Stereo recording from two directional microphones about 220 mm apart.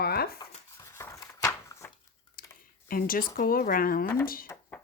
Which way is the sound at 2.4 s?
40° left (ahead or behind).